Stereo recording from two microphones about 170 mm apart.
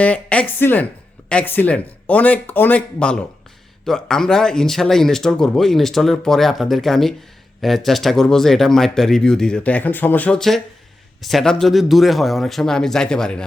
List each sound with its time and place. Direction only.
0.0 s speech: 5° left (ahead or behind)